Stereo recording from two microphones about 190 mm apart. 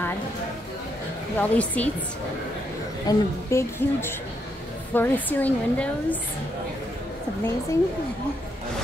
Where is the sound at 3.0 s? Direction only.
15° left (ahead or behind).